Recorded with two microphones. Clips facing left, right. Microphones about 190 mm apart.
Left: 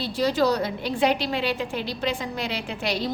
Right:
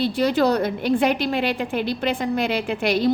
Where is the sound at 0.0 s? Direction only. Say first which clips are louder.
Right 3 dB; 60° right (ahead or behind).